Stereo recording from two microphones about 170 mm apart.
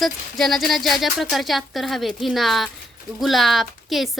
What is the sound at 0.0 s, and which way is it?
Speech, centre (ahead or behind).